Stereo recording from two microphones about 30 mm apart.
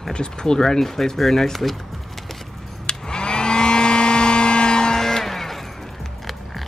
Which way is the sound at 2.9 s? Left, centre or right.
Left.